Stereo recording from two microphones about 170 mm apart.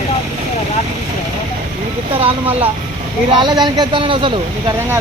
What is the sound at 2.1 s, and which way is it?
Speech, 35° right (ahead or behind).